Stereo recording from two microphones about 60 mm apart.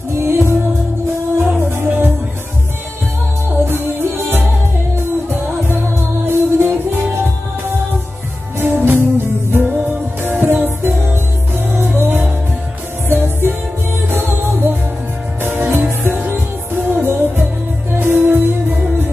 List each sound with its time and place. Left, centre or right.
0.1 s music: right
1.6 s music: right
3.5 s music: right
8.5 s music: right